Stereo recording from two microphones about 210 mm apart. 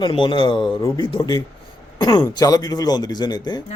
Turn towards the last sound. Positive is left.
turn(degrees=20)  # may be behind; listen again after turning